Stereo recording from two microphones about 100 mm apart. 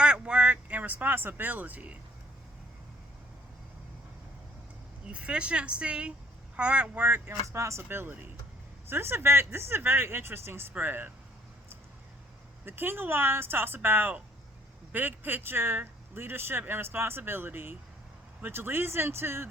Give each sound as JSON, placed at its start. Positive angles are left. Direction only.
{"t": 0.0, "sound": "vehicle", "side_deg": -10}
{"t": 5.0, "sound": "speech", "side_deg": -10}
{"t": 7.5, "sound": "speech", "side_deg": -30}
{"t": 12.6, "sound": "speech", "side_deg": -20}